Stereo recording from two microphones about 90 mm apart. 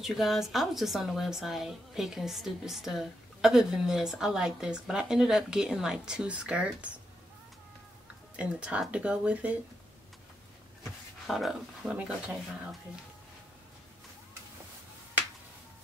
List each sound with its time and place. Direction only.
0.0 s speech: centre (ahead or behind)
8.4 s speech: 15° right (ahead or behind)
11.2 s speech: centre (ahead or behind)
11.9 s speech: 15° right (ahead or behind)